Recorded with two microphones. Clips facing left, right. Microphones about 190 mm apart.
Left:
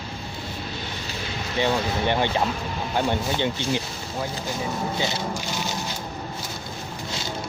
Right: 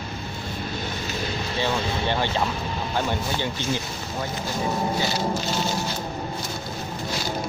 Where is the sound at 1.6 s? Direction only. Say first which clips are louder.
Left 3 dB; 15° left (ahead or behind).